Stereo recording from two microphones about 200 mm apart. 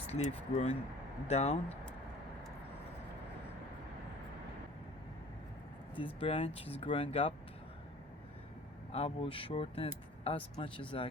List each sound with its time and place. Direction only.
0.1 s speech: 30° left (ahead or behind)
6.1 s speech: 30° left (ahead or behind)
8.9 s speech: 30° left (ahead or behind)